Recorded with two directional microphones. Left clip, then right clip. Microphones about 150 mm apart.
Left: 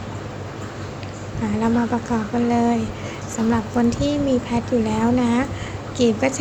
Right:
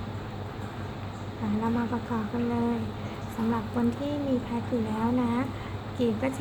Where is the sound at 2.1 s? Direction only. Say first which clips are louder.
Left 8 dB; 30° left (ahead or behind).